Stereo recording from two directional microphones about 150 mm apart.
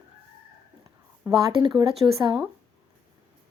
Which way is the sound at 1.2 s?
30° right (ahead or behind).